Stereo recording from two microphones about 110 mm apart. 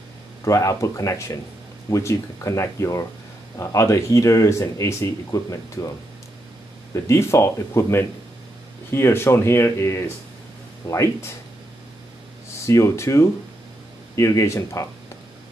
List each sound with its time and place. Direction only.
0.5 s speech: 30° left (ahead or behind)
6.9 s speech: 25° left (ahead or behind)
12.6 s speech: 25° left (ahead or behind)